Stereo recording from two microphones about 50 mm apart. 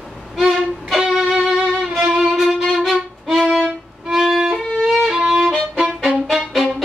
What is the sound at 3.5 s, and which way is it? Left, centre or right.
Violin, right.